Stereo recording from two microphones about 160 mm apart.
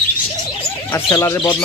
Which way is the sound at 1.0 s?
20° left (ahead or behind).